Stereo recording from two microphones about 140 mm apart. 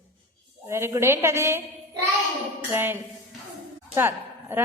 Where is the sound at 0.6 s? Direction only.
20° right (ahead or behind).